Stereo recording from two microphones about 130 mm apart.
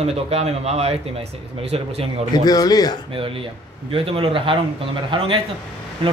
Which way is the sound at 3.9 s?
45° right (ahead or behind).